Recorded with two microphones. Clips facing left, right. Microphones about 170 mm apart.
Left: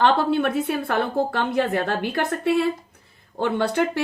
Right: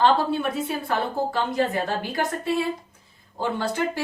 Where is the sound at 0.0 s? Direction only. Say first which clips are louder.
Left 2 dB; 65° left (ahead or behind).